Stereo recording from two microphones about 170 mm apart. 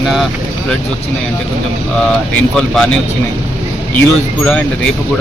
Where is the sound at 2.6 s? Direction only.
Centre (ahead or behind).